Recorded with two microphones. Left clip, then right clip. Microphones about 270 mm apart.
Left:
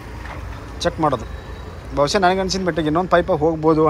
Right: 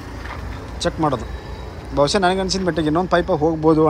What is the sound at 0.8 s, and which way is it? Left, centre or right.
Speech, centre.